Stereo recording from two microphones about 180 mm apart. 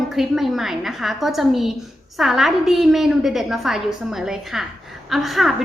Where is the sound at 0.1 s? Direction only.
Centre (ahead or behind).